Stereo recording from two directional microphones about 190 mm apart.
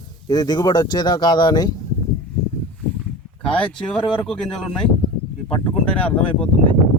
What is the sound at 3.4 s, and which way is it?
A man's voice, 5° left (ahead or behind).